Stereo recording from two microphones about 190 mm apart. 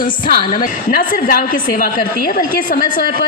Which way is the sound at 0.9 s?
50° left (ahead or behind).